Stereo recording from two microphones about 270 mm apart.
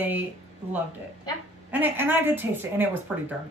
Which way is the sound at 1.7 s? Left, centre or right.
Centre.